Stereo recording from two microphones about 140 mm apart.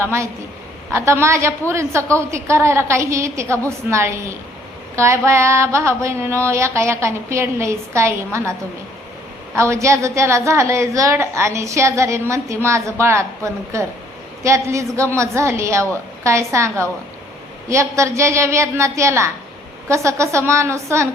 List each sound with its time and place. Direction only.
0.0 s a woman's voice: 20° right (ahead or behind)
9.6 s a woman's voice: 20° right (ahead or behind)